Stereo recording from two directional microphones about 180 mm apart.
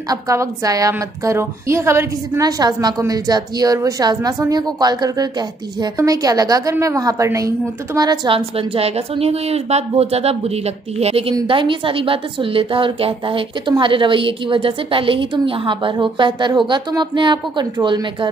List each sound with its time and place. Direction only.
0.1 s a woman's voice: 20° right (ahead or behind)